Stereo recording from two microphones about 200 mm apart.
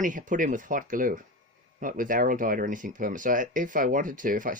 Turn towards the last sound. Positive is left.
turn(degrees=-40)  # may be behind; listen again after turning